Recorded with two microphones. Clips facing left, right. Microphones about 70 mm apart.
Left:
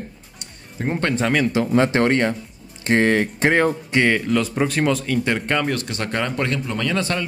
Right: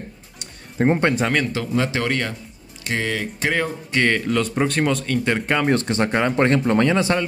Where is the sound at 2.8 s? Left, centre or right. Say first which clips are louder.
Left 7 dB; left.